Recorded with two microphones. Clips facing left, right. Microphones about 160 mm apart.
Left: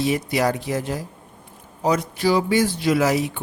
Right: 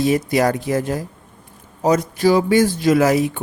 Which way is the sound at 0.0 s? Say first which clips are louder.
Right 4 dB; 45° right (ahead or behind).